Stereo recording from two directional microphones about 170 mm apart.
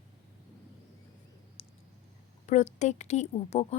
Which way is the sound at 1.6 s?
35° left (ahead or behind).